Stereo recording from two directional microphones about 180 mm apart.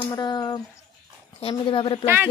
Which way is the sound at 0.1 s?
25° left (ahead or behind).